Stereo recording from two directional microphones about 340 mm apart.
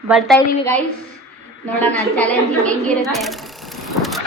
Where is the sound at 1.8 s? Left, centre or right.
Centre.